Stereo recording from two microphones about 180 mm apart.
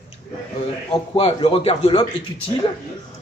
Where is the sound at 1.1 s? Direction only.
30° left (ahead or behind).